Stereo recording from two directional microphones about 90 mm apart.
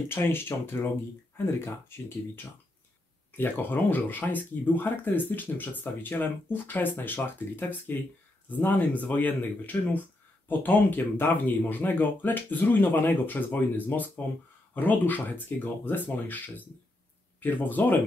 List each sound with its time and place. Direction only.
0.1 s speech: 25° left (ahead or behind)